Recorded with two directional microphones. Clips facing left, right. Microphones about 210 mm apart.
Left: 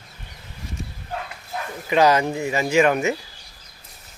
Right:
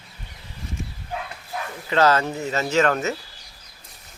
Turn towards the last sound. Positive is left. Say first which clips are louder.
# left 3 dB
turn(degrees=15)  # may be behind; listen again after turning